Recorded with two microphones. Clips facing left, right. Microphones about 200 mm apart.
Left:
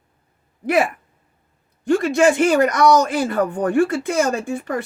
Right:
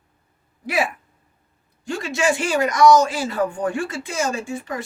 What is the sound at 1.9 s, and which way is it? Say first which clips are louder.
Speech: left 7 dB; 55° left (ahead or behind).